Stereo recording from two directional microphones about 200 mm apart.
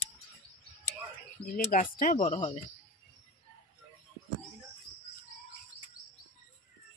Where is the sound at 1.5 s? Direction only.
45° left (ahead or behind).